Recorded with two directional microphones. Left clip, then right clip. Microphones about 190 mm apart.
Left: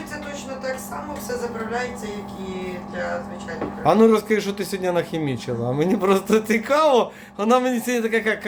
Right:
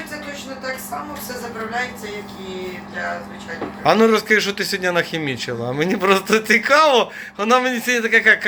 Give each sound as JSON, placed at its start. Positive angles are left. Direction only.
{"t": 3.8, "sound": "a man's voice", "side_deg": 10}